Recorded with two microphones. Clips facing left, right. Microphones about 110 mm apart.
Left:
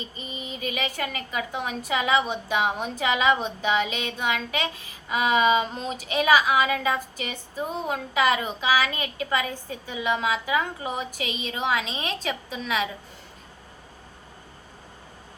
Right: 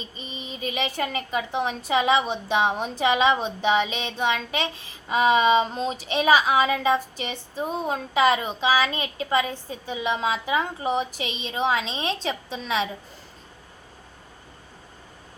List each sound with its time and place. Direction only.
0.2 s a woman's voice: 25° right (ahead or behind)